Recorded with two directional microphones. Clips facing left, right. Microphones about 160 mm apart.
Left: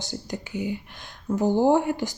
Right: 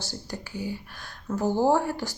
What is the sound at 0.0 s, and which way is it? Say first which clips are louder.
Speech: left 3 dB; 20° left (ahead or behind).